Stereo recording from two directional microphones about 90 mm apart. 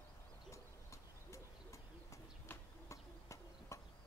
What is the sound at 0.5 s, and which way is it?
Owl, 35° left (ahead or behind).